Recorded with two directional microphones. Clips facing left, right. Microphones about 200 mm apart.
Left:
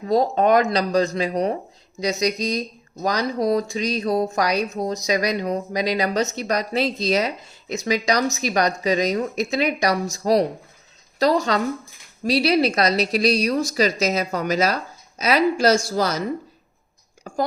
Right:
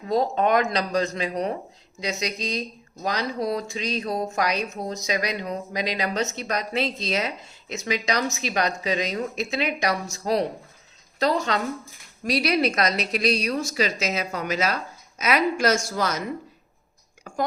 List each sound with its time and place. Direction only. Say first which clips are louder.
0.1 s speech: left 4 dB; 35° left (ahead or behind)